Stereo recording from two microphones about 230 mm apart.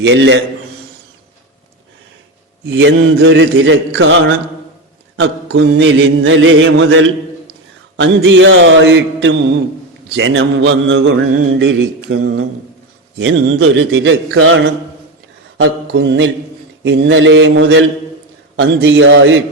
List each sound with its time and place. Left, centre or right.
0.0 s mantra: right
2.6 s mantra: right